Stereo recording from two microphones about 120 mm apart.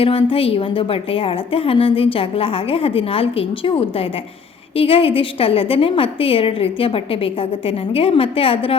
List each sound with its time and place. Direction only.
0.0 s a woman's voice: 50° left (ahead or behind)